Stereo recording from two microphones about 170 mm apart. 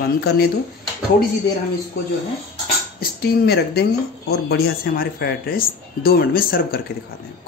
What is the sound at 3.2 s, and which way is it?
Speech, 70° left (ahead or behind).